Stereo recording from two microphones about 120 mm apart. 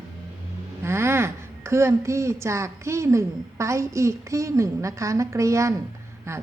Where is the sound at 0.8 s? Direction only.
20° right (ahead or behind).